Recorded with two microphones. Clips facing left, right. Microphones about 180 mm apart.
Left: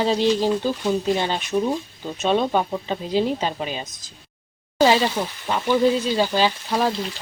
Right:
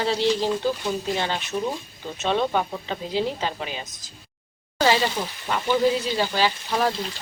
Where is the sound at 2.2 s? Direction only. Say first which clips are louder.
Left 3 dB; 15° left (ahead or behind).